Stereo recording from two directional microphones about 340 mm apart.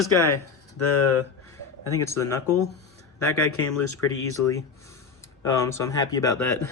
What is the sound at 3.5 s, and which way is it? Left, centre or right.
Speech, left.